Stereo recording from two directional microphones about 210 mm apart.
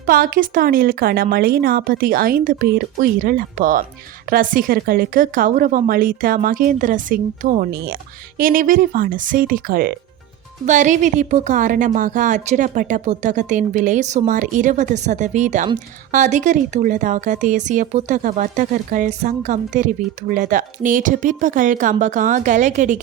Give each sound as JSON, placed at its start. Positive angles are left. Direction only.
{"t": 0.0, "sound": "speech", "side_deg": -40}